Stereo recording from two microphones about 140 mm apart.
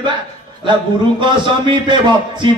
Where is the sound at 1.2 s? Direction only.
35° right (ahead or behind).